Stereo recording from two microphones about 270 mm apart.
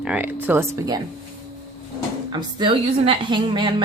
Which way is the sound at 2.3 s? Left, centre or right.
Centre.